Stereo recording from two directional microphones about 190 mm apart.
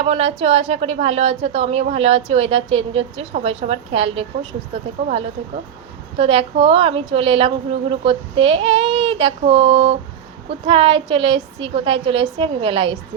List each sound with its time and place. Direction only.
0.0 s a woman's voice: 35° right (ahead or behind)
6.1 s a woman's voice: 30° right (ahead or behind)